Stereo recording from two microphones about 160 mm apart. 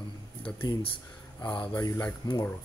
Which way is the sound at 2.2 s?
25° left (ahead or behind).